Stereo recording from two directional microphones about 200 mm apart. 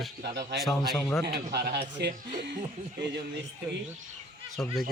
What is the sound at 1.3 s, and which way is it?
Speech, 55° right (ahead or behind).